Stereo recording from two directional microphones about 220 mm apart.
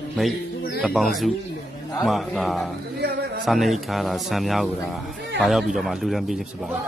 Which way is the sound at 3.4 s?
Centre (ahead or behind).